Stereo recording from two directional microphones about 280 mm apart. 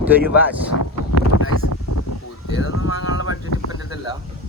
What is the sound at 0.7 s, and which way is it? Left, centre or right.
Wind noise, left.